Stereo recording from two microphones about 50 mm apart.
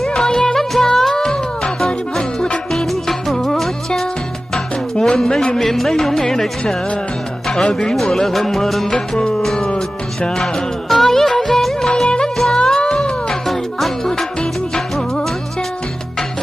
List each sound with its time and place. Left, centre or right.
0.1 s music: centre
2.7 s music: centre
4.5 s music: centre
12.0 s music of bollywood: centre
12.5 s music: centre
13.5 s music: centre
14.9 s music of bollywood: centre